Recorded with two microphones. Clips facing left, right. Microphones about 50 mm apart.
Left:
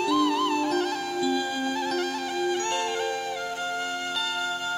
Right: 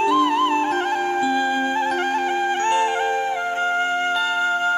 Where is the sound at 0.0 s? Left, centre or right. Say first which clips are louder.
Right 6 dB; right.